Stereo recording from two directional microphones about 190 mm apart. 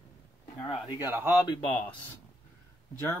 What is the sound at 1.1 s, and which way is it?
Speech, 10° right (ahead or behind).